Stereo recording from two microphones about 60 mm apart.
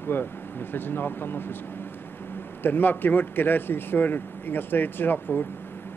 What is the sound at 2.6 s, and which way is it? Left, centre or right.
Speech, left.